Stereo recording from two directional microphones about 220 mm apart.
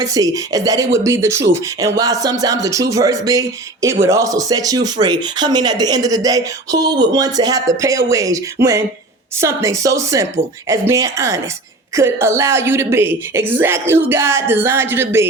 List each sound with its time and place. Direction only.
0.0 s speech: 15° right (ahead or behind)